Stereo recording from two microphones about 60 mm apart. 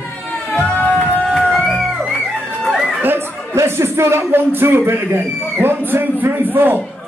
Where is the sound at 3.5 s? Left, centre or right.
Right.